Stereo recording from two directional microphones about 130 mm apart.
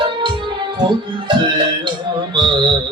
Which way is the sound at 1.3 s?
35° right (ahead or behind).